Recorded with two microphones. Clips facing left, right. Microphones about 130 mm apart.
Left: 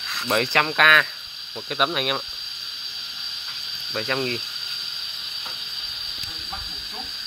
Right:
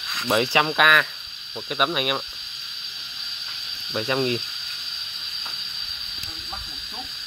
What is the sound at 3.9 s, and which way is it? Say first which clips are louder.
Speech: right 3 dB; 10° right (ahead or behind).